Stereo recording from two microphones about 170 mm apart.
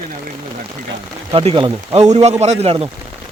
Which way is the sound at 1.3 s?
35° right (ahead or behind).